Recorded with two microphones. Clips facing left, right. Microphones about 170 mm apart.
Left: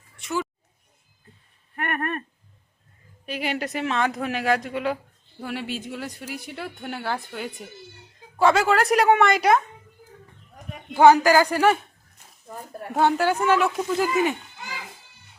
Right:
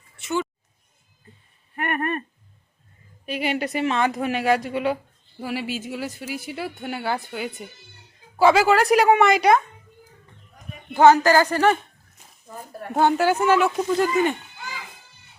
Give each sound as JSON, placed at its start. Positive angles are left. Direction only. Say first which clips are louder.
{"t": 0.2, "sound": "a sound", "louder": "right 2 dB", "side_deg": 0}
{"t": 3.2, "sound": "speech", "louder": "right 3 dB", "side_deg": 0}
{"t": 10.9, "sound": "speech", "louder": "even", "side_deg": 10}
{"t": 12.9, "sound": "speech", "louder": "right 2 dB", "side_deg": 0}